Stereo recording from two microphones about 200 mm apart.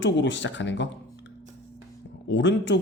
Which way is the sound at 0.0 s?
65° left (ahead or behind).